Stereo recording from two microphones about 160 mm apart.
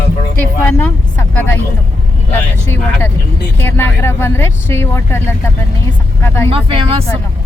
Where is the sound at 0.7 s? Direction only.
10° left (ahead or behind).